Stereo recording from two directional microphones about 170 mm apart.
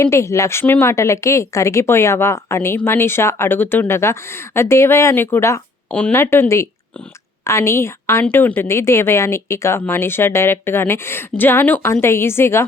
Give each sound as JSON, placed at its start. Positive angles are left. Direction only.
{"t": 0.0, "sound": "a woman's voice", "side_deg": 15}